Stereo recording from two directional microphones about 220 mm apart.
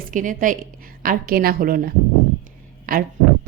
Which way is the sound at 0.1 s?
35° right (ahead or behind).